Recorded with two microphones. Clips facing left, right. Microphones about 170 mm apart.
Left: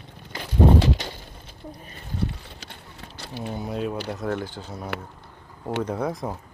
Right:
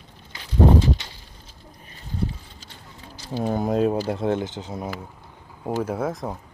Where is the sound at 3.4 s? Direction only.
50° right (ahead or behind).